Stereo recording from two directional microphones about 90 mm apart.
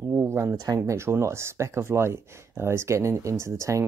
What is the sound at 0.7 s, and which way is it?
Speech, 30° right (ahead or behind).